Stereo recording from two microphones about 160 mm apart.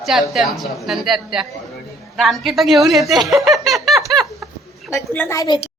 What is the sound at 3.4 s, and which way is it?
Giggle, centre (ahead or behind).